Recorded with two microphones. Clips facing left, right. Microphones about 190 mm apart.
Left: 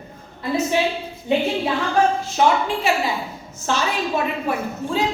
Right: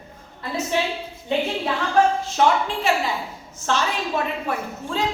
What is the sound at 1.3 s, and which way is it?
A woman's voice, 10° left (ahead or behind).